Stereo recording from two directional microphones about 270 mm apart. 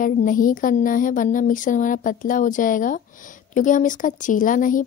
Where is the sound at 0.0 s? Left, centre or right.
Left.